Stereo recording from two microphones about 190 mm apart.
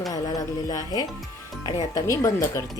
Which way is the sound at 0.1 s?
20° left (ahead or behind).